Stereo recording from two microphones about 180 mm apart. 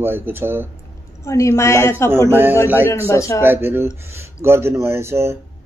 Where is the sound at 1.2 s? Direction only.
15° left (ahead or behind).